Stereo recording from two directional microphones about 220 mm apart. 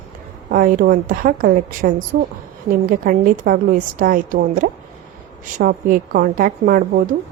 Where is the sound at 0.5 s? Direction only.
40° right (ahead or behind).